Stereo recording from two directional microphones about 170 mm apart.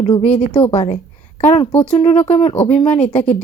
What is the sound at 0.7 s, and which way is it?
Speech, 35° left (ahead or behind).